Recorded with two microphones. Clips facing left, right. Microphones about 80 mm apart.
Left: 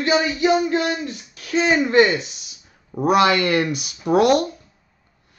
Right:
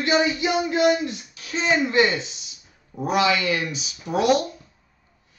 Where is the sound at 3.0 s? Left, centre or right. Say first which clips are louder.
Left 5 dB; left.